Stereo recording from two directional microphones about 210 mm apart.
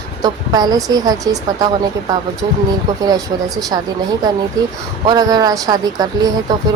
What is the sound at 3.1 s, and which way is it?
Speech, 20° right (ahead or behind).